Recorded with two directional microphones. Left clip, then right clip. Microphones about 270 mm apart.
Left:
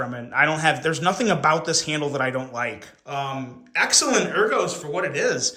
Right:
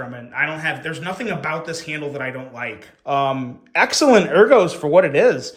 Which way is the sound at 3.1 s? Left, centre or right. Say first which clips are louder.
Right 9 dB; centre.